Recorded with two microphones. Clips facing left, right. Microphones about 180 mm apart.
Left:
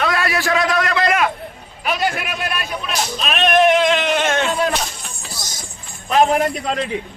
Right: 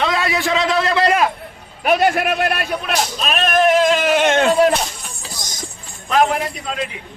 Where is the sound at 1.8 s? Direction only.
55° right (ahead or behind).